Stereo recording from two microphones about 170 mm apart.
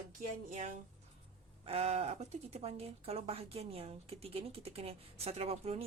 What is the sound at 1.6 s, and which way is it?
Speech, 35° right (ahead or behind).